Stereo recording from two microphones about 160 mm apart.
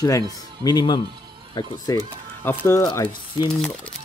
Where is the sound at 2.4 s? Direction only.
15° left (ahead or behind).